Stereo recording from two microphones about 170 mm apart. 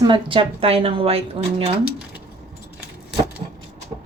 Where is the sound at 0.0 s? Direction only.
30° right (ahead or behind).